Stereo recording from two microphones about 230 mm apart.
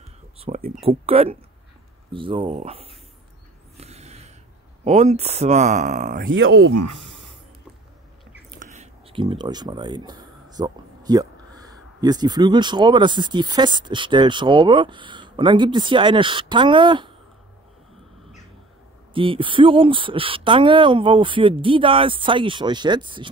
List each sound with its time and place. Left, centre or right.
0.7 s speech: right
3.7 s a sound: right
4.8 s speech: right
8.5 s speech: right
19.1 s speech: right